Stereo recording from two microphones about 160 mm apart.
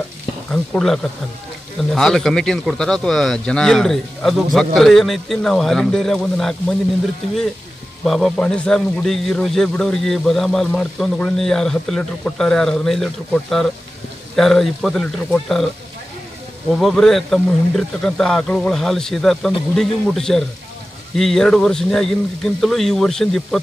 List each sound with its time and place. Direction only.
0.5 s a man's voice: 5° left (ahead or behind)
8.0 s a man's voice: centre (ahead or behind)
16.7 s a man's voice: centre (ahead or behind)